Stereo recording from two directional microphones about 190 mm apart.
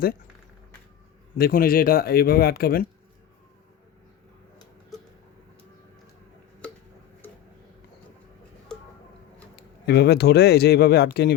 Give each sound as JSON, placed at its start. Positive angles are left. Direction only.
{"t": 1.4, "sound": "speech", "side_deg": 50}
{"t": 9.6, "sound": "speech", "side_deg": 60}